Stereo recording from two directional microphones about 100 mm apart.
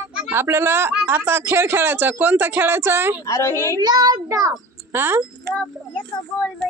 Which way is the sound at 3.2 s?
30° left (ahead or behind).